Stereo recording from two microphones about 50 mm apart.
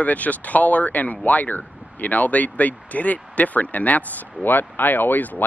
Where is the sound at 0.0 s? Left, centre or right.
Left.